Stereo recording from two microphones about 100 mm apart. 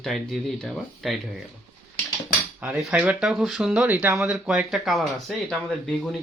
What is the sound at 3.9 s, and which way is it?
Cutlery, 15° right (ahead or behind).